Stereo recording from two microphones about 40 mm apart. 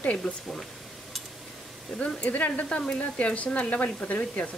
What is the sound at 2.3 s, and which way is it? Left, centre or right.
A woman's voice, left.